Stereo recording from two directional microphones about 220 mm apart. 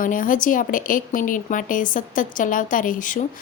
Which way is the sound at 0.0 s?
40° left (ahead or behind).